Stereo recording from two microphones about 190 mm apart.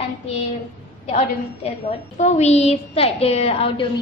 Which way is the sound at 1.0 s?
35° left (ahead or behind).